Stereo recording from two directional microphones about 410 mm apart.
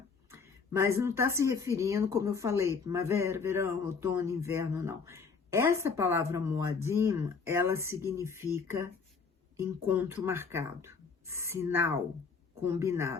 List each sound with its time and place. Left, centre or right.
0.3 s speech: centre